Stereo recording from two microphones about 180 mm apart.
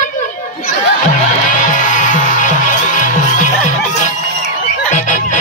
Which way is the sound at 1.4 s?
45° left (ahead or behind).